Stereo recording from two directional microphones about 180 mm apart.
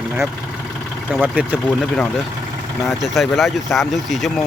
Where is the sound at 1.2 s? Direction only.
10° right (ahead or behind).